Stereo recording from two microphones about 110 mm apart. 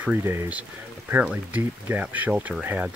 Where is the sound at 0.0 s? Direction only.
20° right (ahead or behind).